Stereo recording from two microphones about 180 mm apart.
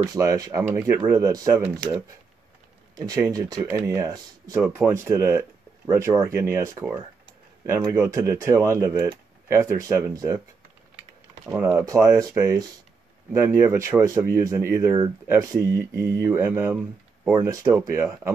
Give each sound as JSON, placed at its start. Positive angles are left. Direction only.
{"t": 0.1, "sound": "speech", "side_deg": -20}
{"t": 3.1, "sound": "speech", "side_deg": -20}
{"t": 11.4, "sound": "speech", "side_deg": -10}